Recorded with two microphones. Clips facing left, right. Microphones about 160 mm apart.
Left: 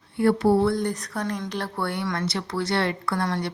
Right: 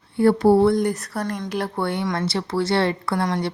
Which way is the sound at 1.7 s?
20° right (ahead or behind).